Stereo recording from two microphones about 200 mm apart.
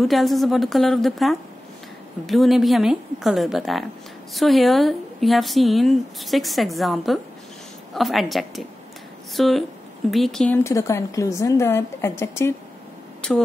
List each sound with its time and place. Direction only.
0.0 s a woman's voice: centre (ahead or behind)